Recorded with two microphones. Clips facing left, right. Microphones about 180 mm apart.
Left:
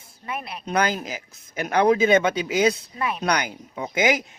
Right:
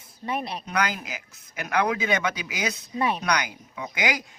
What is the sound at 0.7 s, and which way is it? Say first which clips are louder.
A man's voice: left 6 dB; 25° left (ahead or behind).